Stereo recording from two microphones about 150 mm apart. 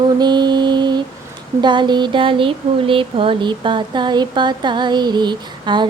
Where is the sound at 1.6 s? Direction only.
30° right (ahead or behind).